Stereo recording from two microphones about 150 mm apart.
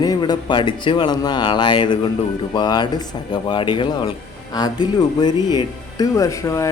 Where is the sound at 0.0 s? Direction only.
25° left (ahead or behind).